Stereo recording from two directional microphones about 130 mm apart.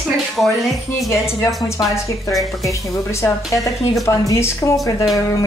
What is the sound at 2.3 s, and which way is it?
Speech, centre (ahead or behind).